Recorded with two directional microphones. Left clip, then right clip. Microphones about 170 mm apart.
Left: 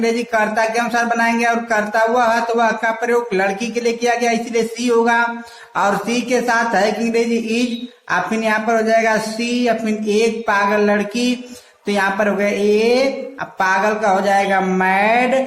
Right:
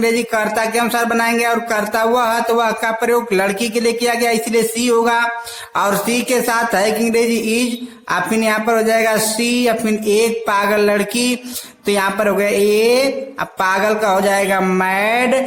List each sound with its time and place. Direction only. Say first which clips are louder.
0.0 s a man's voice: right 1 dB; 35° right (ahead or behind)